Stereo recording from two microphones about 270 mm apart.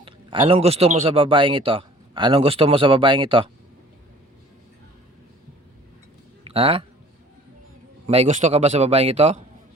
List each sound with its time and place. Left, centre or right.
0.0 s a man's voice: centre
6.5 s a man's voice: right
8.0 s a man's voice: right